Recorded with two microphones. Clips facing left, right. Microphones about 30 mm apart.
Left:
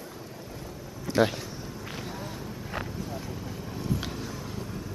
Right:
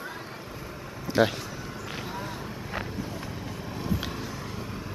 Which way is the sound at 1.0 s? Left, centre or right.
Centre.